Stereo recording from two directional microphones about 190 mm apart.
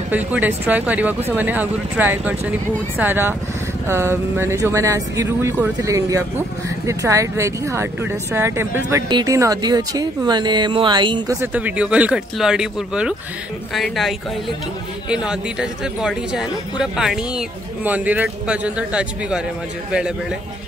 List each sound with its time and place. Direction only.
0.1 s speech: 10° right (ahead or behind)
11.5 s speech: 5° right (ahead or behind)